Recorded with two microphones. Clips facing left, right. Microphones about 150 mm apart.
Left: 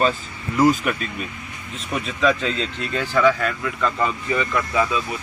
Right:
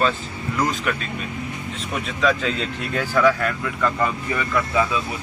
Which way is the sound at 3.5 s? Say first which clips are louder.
Even; centre (ahead or behind).